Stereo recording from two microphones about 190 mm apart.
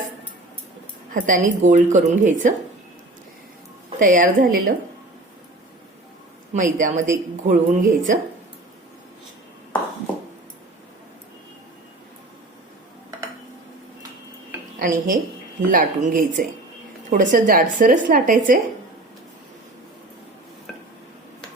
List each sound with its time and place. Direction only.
1.1 s a woman's voice: 45° right (ahead or behind)
4.0 s a woman's voice: 45° right (ahead or behind)
6.5 s a woman's voice: 40° right (ahead or behind)
14.8 s a woman's voice: 45° right (ahead or behind)